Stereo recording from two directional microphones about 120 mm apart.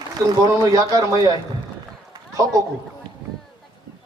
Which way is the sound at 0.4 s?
30° right (ahead or behind).